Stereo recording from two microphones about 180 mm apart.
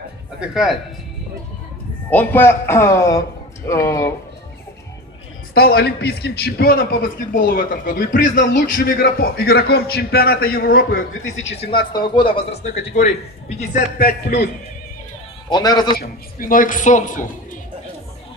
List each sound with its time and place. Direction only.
0.4 s speech: 5° right (ahead or behind)
2.0 s a man's voice: 10° left (ahead or behind)
5.5 s speech: 60° left (ahead or behind)
11.2 s speech: 90° left
11.5 s speech: 30° left (ahead or behind)
12.4 s speech: 35° left (ahead or behind)
13.6 s a man's voice: 50° left (ahead or behind)
15.5 s speech: 25° left (ahead or behind)
16.0 s a man's voice: 50° left (ahead or behind)